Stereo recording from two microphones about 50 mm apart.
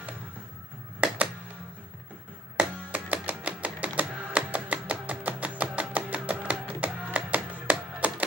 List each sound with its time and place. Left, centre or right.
1.0 s music: right
2.9 s music: right